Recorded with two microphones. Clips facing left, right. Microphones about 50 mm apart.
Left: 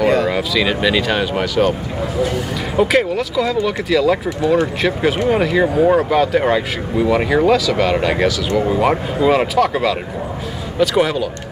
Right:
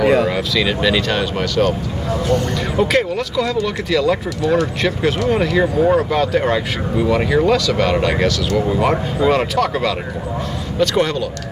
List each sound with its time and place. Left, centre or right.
0.0 s a sound: centre
0.3 s speech: centre
4.4 s speech: left
5.3 s speech: centre